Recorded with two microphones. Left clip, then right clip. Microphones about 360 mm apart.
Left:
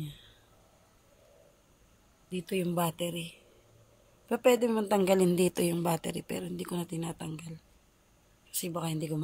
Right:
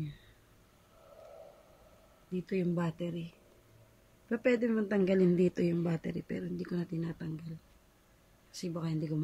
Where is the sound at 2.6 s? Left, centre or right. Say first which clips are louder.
Left 5 dB; centre.